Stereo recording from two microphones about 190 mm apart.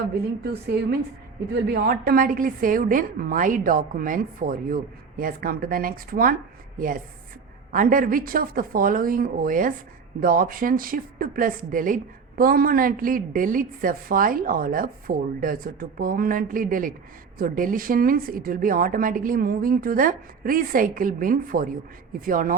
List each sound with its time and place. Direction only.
0.7 s a woman's voice: 55° right (ahead or behind)